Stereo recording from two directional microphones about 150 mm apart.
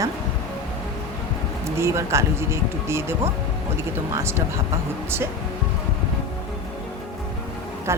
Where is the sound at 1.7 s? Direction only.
20° right (ahead or behind).